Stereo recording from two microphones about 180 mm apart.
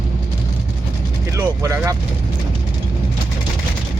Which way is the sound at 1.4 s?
15° right (ahead or behind).